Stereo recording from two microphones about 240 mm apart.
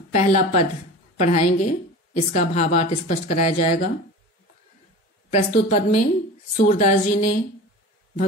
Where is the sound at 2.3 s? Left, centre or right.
Left.